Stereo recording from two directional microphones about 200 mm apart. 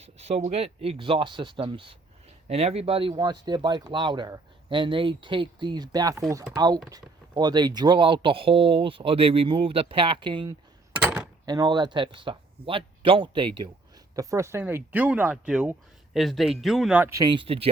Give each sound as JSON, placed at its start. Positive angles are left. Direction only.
{"t": 0.0, "sound": "speech", "side_deg": -30}
{"t": 11.0, "sound": "a sound", "side_deg": -5}
{"t": 11.4, "sound": "speech", "side_deg": -20}